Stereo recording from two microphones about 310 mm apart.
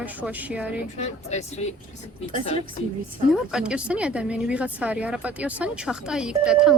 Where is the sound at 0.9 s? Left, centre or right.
Left.